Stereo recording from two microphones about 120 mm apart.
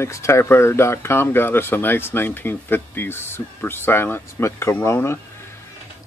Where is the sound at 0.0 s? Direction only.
20° left (ahead or behind).